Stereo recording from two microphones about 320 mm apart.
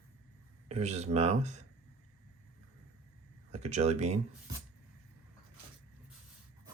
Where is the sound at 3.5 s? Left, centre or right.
Right.